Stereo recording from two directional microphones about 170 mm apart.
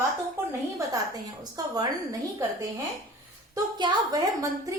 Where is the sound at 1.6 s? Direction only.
20° right (ahead or behind).